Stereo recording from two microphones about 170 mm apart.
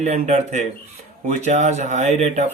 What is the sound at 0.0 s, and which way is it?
Speech, 45° right (ahead or behind).